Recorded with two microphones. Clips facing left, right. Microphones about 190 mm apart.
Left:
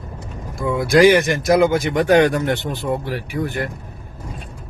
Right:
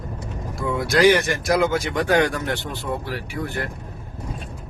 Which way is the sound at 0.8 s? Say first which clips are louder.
Left 4 dB; 15° left (ahead or behind).